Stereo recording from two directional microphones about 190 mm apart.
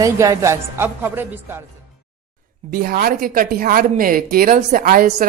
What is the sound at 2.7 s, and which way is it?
A woman's voice, 50° right (ahead or behind).